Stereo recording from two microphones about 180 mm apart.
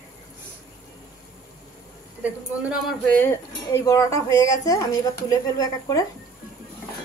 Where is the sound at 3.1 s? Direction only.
15° left (ahead or behind).